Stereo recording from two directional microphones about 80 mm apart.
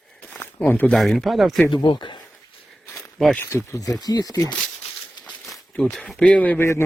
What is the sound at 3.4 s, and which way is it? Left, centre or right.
Speech, left.